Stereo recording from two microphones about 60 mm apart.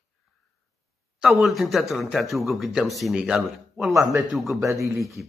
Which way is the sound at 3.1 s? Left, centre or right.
Centre.